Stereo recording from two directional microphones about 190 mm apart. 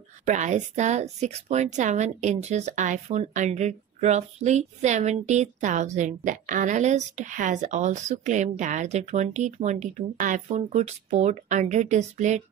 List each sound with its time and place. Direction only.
0.3 s speech: 40° right (ahead or behind)